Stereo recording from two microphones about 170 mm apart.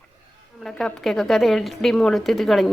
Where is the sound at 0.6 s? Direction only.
5° left (ahead or behind).